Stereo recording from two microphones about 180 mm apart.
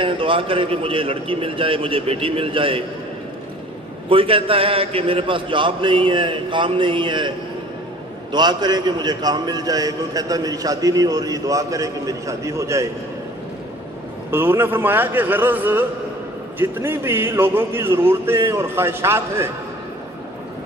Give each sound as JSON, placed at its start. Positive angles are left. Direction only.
{"t": 0.0, "sound": "a man's voice", "side_deg": -30}
{"t": 4.1, "sound": "a man's voice", "side_deg": -30}
{"t": 14.3, "sound": "speech", "side_deg": -10}